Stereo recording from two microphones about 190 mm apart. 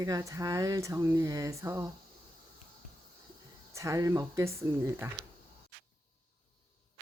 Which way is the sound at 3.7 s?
15° right (ahead or behind).